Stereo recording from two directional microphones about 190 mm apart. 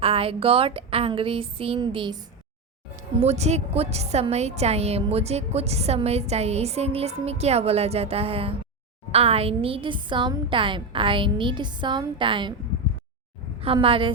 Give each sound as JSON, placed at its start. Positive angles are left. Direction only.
{"t": 0.0, "sound": "a woman's voice", "side_deg": -30}
{"t": 3.2, "sound": "a woman's voice", "side_deg": -35}
{"t": 13.6, "sound": "a woman's voice", "side_deg": -30}